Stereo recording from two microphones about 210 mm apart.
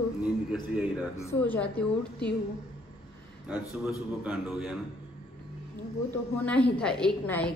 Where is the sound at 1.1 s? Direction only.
15° left (ahead or behind).